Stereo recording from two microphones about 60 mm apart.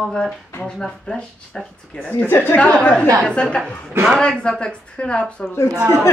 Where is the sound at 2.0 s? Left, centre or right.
Left.